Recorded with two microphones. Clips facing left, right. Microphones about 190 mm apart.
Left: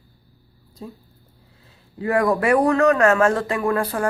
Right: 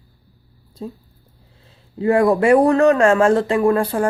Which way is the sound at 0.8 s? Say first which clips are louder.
Right 5 dB; 30° right (ahead or behind).